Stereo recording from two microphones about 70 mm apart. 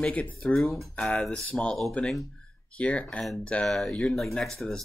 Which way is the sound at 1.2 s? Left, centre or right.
Centre.